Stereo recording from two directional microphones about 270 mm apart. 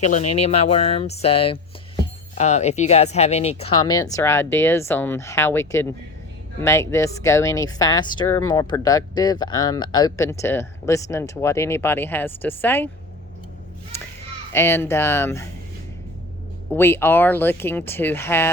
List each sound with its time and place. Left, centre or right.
0.0 s speech: left; by 12.9 s centre
14.5 s speech: centre
16.7 s speech: centre